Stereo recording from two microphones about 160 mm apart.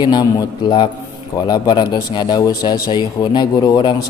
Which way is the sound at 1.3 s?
25° left (ahead or behind).